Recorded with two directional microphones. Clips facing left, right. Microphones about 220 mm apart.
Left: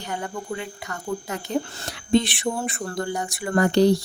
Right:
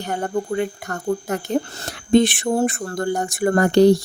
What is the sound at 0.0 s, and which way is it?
Speech, 45° right (ahead or behind).